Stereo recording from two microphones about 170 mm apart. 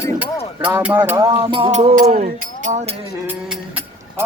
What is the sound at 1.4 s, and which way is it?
Music, 30° right (ahead or behind).